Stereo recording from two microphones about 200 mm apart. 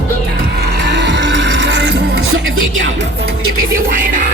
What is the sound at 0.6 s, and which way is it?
Music, 60° right (ahead or behind).